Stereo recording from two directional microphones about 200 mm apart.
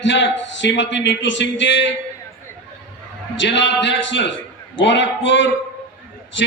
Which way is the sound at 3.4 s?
65° left (ahead or behind).